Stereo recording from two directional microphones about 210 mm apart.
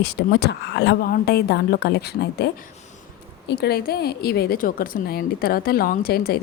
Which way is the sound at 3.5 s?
50° left (ahead or behind).